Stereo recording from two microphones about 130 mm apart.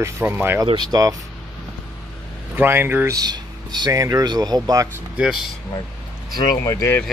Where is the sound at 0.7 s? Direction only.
30° right (ahead or behind).